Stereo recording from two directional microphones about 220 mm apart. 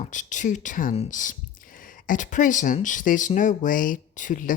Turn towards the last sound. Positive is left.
turn(degrees=35)  # may be behind; listen again after turning